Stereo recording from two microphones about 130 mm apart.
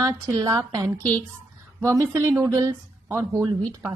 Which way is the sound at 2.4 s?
20° right (ahead or behind).